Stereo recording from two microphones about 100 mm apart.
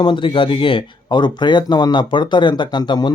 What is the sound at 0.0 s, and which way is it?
Speech, 55° left (ahead or behind).